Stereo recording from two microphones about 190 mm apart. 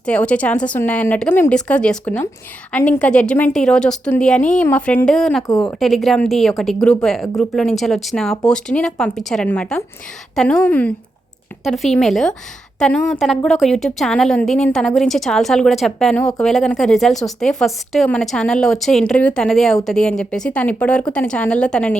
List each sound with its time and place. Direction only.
0.0 s a woman's voice: 5° left (ahead or behind)
5.4 s a woman's voice: 15° left (ahead or behind)
5.6 s a woman's voice: centre (ahead or behind)